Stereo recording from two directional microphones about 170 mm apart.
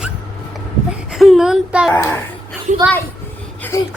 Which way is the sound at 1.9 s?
15° left (ahead or behind).